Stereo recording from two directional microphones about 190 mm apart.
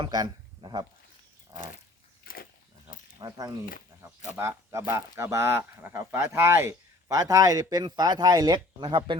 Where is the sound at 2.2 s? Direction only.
50° left (ahead or behind).